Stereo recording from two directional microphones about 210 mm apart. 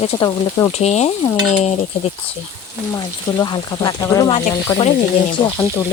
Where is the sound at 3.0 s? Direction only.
20° left (ahead or behind).